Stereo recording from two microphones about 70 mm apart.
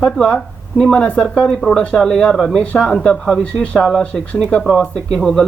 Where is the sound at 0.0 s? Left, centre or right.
Centre.